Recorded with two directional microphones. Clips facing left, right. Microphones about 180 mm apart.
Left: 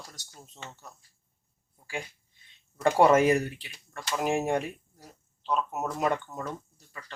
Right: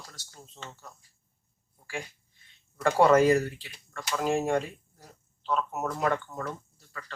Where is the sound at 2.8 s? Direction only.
20° left (ahead or behind).